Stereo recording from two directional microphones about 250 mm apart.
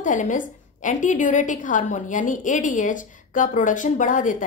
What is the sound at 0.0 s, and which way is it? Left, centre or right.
A woman's voice, left.